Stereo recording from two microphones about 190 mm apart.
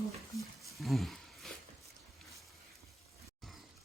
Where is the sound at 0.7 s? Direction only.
Centre (ahead or behind).